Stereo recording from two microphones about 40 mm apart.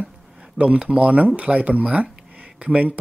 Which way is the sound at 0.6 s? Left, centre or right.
Right.